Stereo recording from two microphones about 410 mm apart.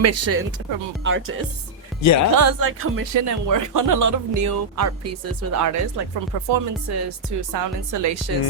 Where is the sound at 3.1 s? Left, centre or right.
Right.